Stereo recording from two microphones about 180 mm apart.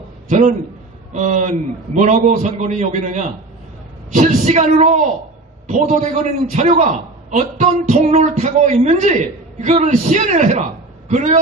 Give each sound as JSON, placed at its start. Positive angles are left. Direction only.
{"t": 0.3, "sound": "a man's voice", "side_deg": -45}